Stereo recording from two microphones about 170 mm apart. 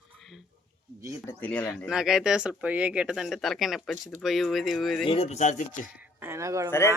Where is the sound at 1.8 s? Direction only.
5° right (ahead or behind).